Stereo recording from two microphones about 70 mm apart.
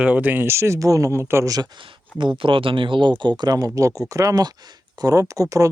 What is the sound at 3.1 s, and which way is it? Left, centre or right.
Speech, right.